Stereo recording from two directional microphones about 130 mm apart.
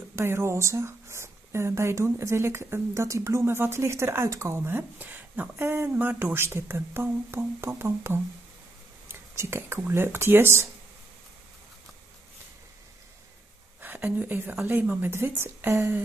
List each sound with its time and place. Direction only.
0.1 s speech: 20° right (ahead or behind)
13.7 s a woman's voice: 15° right (ahead or behind)